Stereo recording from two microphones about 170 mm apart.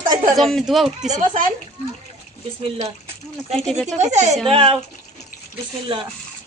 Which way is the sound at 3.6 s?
5° left (ahead or behind).